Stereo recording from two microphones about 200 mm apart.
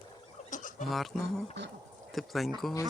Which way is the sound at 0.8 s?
Centre (ahead or behind).